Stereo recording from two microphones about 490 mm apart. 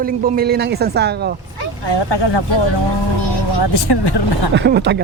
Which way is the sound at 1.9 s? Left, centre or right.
Left.